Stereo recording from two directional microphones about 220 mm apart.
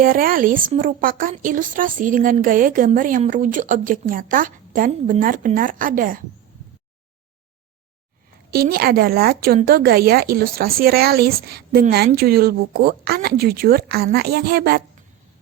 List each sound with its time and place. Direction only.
0.0 s a woman's voice: 40° right (ahead or behind)
8.4 s a woman's voice: 45° right (ahead or behind)